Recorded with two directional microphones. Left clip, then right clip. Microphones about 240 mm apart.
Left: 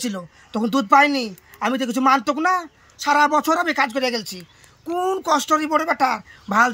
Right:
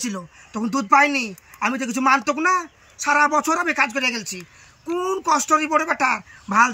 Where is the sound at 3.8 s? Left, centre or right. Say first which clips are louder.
Even; centre.